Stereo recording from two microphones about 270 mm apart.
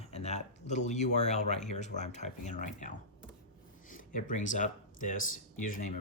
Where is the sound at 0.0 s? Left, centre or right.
Left.